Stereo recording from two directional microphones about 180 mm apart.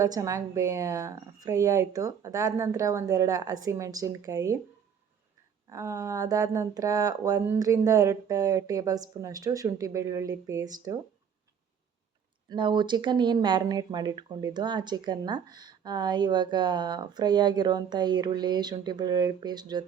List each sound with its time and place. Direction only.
0.0 s a woman's voice: 20° right (ahead or behind)
5.6 s speech: 15° right (ahead or behind)
12.5 s speech: 25° right (ahead or behind)